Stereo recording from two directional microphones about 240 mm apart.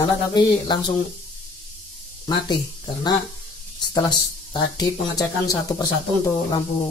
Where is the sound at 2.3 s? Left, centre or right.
Centre.